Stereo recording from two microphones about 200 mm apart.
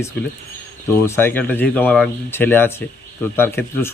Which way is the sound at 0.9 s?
15° left (ahead or behind).